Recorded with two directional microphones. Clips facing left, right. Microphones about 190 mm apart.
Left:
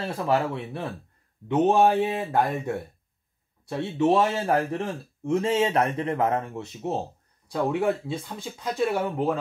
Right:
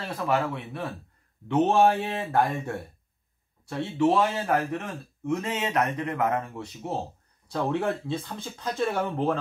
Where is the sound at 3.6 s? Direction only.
20° left (ahead or behind).